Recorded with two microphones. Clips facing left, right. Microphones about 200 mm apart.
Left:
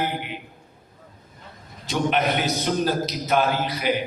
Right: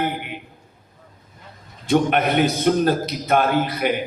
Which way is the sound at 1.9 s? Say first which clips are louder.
Right 5 dB; 55° right (ahead or behind).